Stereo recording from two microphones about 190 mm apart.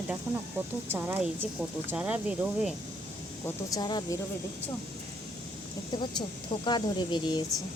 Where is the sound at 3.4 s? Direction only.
20° left (ahead or behind).